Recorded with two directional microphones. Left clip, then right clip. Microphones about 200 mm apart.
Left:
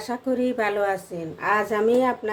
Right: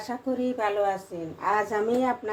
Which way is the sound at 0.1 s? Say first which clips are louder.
Left 5 dB; 30° left (ahead or behind).